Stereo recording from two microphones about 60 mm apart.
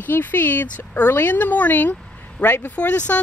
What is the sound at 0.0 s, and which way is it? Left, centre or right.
A woman's voice, left.